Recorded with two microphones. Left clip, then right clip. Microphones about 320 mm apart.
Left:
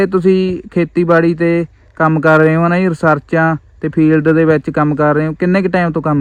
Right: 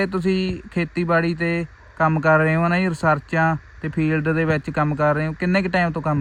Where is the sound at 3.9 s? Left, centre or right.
Left.